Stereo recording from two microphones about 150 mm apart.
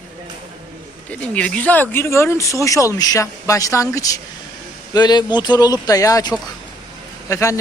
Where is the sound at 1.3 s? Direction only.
10° left (ahead or behind).